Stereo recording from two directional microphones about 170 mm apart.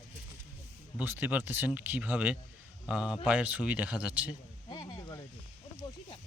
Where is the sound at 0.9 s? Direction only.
10° right (ahead or behind).